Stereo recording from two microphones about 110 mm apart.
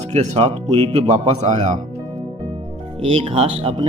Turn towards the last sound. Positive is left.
turn(degrees=-55)  # may be behind; listen again after turning